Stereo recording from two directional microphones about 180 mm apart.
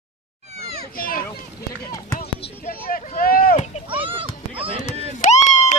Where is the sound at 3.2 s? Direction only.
55° left (ahead or behind).